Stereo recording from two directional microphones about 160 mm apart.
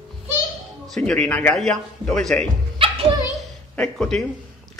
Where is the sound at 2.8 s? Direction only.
35° right (ahead or behind).